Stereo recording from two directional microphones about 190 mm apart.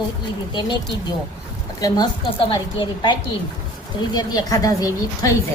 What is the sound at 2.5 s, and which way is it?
A woman's voice, 25° left (ahead or behind).